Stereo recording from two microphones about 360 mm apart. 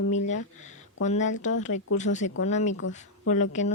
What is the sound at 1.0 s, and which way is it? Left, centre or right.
Speech, centre.